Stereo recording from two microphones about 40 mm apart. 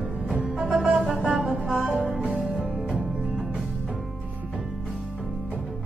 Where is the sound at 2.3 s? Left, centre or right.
Centre.